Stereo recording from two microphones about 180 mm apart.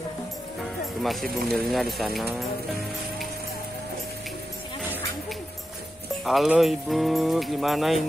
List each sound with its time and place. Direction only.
1.2 s speech: 55° right (ahead or behind)
1.7 s speech: centre (ahead or behind)
6.2 s speech: centre (ahead or behind)